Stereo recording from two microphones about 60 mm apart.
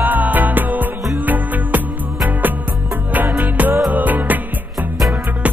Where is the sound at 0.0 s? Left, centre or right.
Right.